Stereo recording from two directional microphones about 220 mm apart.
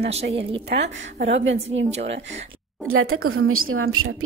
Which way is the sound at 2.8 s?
70° right (ahead or behind).